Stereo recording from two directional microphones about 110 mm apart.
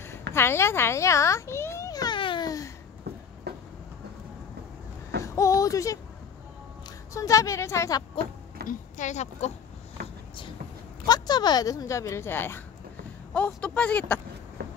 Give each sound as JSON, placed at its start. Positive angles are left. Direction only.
{"t": 0.0, "sound": "a sound", "side_deg": 25}
{"t": 2.1, "sound": "babbling", "side_deg": 50}
{"t": 2.4, "sound": "babbling", "side_deg": 30}
{"t": 5.2, "sound": "a sound", "side_deg": 30}
{"t": 7.2, "sound": "a woman's voice", "side_deg": 30}
{"t": 9.0, "sound": "speech", "side_deg": 90}
{"t": 11.1, "sound": "speech", "side_deg": 40}